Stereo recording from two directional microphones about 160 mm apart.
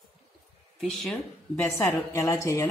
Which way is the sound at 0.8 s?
Centre (ahead or behind).